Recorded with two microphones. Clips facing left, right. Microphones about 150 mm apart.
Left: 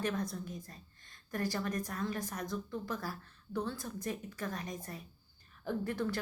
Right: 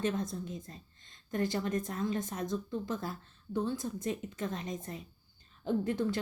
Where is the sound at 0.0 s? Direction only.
25° right (ahead or behind).